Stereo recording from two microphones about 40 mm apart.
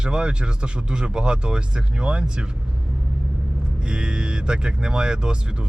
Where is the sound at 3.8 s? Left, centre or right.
Right.